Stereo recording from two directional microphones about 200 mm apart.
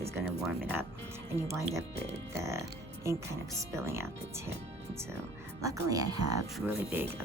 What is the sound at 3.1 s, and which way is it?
Speech, 15° right (ahead or behind).